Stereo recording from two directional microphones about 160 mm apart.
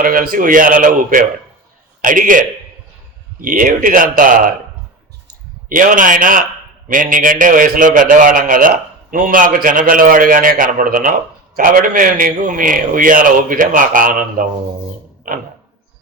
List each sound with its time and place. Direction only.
0.0 s a man's voice: 60° right (ahead or behind)
5.6 s a man's voice: 55° right (ahead or behind)